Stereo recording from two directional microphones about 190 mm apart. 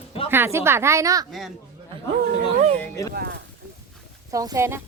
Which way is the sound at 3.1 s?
55° right (ahead or behind).